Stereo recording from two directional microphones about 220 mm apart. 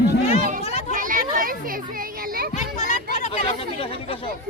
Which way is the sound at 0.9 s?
35° right (ahead or behind).